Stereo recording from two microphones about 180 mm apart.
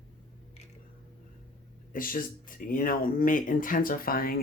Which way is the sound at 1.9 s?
50° left (ahead or behind).